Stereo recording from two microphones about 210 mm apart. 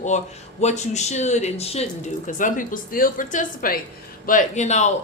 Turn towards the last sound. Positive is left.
turn(degrees=35)  # may be behind; listen again after turning